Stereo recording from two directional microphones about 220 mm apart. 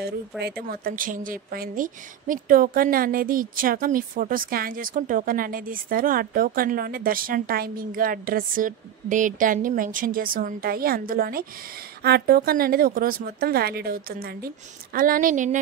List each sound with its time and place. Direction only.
0.4 s speech: 45° right (ahead or behind)